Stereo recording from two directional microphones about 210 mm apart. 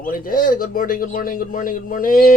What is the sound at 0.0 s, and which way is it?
A man's voice, 40° left (ahead or behind).